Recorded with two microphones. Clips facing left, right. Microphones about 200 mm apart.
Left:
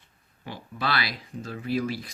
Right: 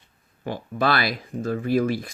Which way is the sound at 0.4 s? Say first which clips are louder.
Right 8 dB; 50° right (ahead or behind).